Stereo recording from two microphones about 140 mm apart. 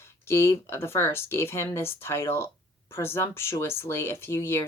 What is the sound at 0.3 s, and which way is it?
Speech, 20° left (ahead or behind).